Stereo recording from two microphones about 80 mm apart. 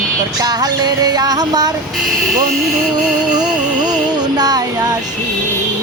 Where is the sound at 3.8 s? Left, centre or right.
Right.